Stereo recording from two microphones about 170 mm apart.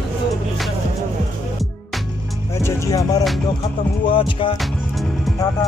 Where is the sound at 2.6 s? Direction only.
20° left (ahead or behind).